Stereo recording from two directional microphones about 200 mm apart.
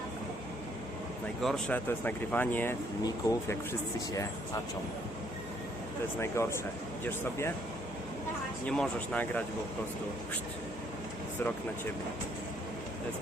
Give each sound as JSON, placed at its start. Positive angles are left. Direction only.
{"t": 1.4, "sound": "speech", "side_deg": 0}
{"t": 6.1, "sound": "speech", "side_deg": 15}
{"t": 8.6, "sound": "speech", "side_deg": 5}